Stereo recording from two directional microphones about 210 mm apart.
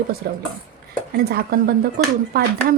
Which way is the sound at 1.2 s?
50° right (ahead or behind).